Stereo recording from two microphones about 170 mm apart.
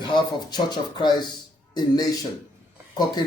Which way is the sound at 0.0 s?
25° left (ahead or behind).